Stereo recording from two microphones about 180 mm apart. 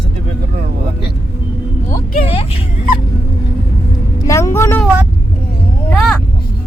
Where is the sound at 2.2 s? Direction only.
30° left (ahead or behind).